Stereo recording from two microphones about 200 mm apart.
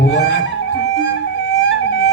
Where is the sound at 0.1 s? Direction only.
60° left (ahead or behind).